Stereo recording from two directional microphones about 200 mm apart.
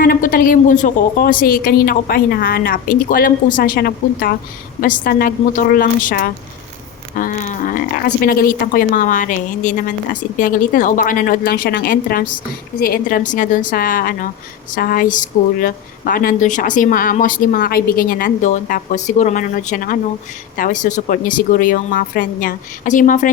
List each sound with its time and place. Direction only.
0.0 s a woman's voice: 45° left (ahead or behind)